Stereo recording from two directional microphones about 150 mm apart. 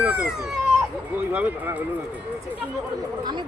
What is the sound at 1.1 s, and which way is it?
Speech, 10° right (ahead or behind).